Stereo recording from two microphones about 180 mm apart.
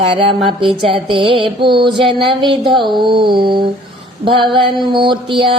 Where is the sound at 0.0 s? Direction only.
30° right (ahead or behind).